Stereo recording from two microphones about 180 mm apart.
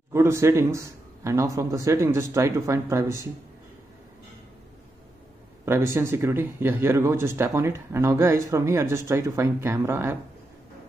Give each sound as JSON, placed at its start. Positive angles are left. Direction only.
{"t": 0.1, "sound": "speech", "side_deg": -15}
{"t": 5.7, "sound": "speech", "side_deg": -15}